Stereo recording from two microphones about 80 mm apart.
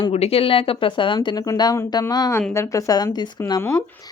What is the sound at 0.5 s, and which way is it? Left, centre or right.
Speech, left.